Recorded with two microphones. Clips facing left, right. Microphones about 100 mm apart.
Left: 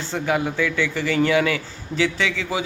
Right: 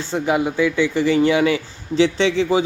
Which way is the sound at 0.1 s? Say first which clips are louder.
Right 3 dB; 20° right (ahead or behind).